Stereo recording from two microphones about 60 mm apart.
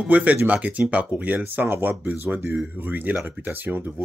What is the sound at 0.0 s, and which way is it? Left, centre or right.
Speech, right.